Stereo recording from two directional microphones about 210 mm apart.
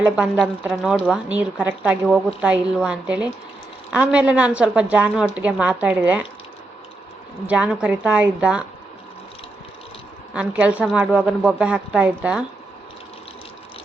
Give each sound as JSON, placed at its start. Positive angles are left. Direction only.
{"t": 0.0, "sound": "a woman's voice", "side_deg": -5}
{"t": 7.4, "sound": "a woman's voice", "side_deg": -5}
{"t": 10.3, "sound": "a woman's voice", "side_deg": -5}